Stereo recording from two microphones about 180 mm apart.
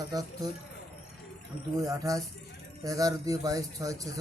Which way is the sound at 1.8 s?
20° right (ahead or behind).